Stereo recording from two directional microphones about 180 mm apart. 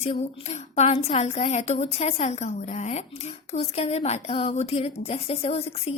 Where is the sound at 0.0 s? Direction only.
35° left (ahead or behind).